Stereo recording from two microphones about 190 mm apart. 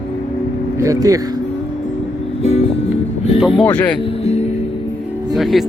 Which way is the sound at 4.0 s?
35° left (ahead or behind).